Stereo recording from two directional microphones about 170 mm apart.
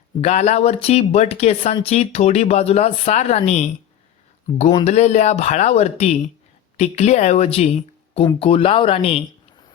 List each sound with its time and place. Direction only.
0.2 s speech: 40° left (ahead or behind)
4.7 s speech: 40° left (ahead or behind)